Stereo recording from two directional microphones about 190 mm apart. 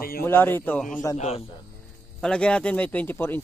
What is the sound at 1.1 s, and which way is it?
Speech, 35° left (ahead or behind).